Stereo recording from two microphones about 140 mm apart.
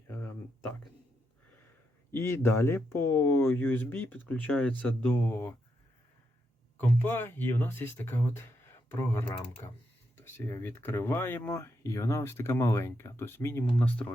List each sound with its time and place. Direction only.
0.1 s a sound: 15° left (ahead or behind)
2.0 s speech: 15° left (ahead or behind)
6.7 s speech: 10° left (ahead or behind)
10.2 s speech: 15° left (ahead or behind)